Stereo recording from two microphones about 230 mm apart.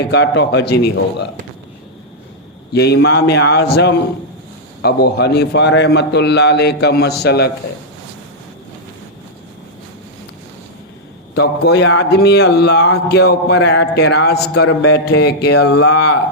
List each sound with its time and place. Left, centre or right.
0.0 s a man's voice: left
2.7 s a man's voice: left
11.3 s a man's voice: left